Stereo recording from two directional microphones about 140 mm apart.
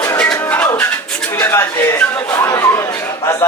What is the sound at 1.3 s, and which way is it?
Chatter, 20° left (ahead or behind).